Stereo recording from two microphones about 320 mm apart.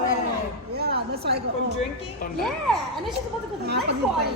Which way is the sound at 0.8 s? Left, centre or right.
Right.